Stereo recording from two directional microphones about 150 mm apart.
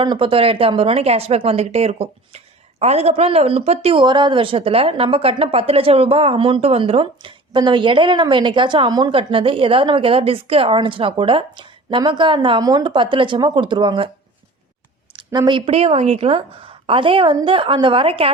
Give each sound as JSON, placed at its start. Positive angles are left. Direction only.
{"t": 0.0, "sound": "speech", "side_deg": -35}
{"t": 15.1, "sound": "speech", "side_deg": -30}